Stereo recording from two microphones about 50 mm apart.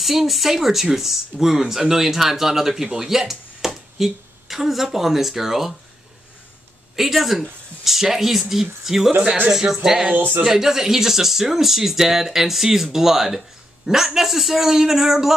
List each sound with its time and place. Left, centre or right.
0.0 s speech: centre
7.0 s speech: centre
10.1 s speech: right
10.4 s speech: centre